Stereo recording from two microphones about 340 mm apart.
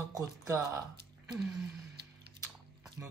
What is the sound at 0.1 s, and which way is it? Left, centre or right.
Speech, centre.